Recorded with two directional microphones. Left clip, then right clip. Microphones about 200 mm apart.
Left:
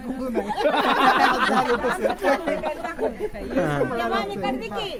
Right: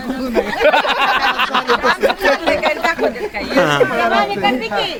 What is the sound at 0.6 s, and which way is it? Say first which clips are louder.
A man's voice: right 5 dB; 55° right (ahead or behind).